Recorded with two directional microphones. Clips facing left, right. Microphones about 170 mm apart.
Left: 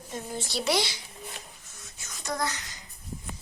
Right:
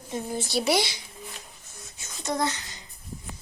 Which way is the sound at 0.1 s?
10° right (ahead or behind).